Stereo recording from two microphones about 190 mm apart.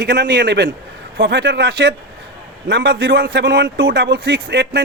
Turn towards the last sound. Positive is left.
turn(degrees=-65)  # may be behind; listen again after turning